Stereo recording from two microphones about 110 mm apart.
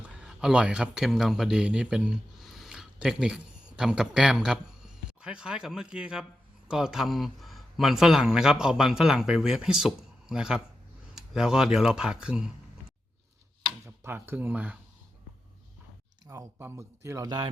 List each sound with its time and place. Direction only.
0.1 s speech: 5° right (ahead or behind)
13.8 s speech: 20° right (ahead or behind)
16.2 s a sound: 30° right (ahead or behind)
16.6 s speech: 25° right (ahead or behind)
17.2 s speech: 40° right (ahead or behind)